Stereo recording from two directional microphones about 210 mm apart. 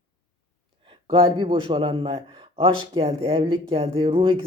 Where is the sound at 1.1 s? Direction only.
25° right (ahead or behind).